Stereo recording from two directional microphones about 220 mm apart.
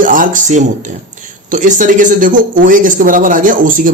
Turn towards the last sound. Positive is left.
turn(degrees=-40)  # may be behind; listen again after turning